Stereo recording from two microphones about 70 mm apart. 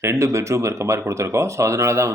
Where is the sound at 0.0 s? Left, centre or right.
Right.